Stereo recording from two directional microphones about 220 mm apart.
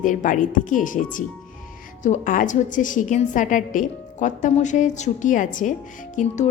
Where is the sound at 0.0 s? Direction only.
35° left (ahead or behind).